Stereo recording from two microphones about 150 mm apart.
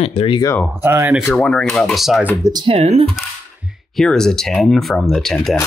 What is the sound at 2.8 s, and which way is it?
Speech, 45° right (ahead or behind).